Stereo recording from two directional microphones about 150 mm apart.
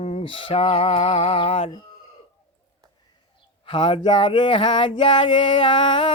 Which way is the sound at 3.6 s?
35° left (ahead or behind).